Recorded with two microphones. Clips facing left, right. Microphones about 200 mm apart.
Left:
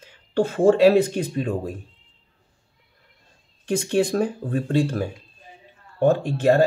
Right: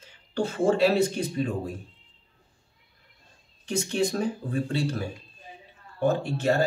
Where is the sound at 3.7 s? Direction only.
55° left (ahead or behind).